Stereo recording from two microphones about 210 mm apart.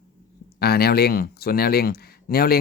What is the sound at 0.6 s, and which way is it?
Speech, 50° left (ahead or behind).